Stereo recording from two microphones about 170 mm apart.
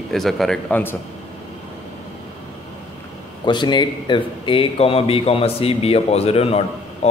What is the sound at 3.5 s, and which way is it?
Speech, 25° left (ahead or behind).